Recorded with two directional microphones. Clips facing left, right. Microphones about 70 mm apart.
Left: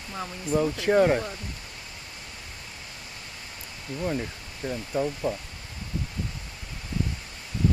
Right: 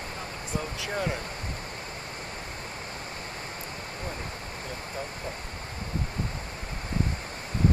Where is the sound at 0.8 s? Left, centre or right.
Left.